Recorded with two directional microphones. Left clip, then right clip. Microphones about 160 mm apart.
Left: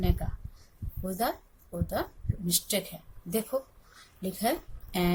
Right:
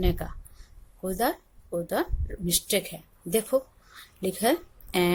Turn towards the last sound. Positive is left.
turn(degrees=-55)  # may be behind; listen again after turning